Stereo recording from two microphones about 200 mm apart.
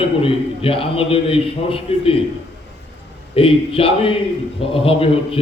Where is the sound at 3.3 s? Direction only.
25° left (ahead or behind).